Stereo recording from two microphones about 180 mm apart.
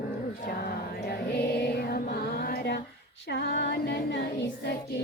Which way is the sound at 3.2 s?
65° left (ahead or behind).